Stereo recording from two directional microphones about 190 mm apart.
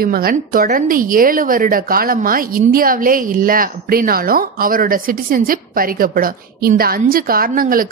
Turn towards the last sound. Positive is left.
turn(degrees=-50)  # may be behind; listen again after turning